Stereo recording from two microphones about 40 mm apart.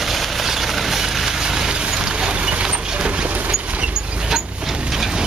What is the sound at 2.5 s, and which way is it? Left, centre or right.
Mechanisms, right.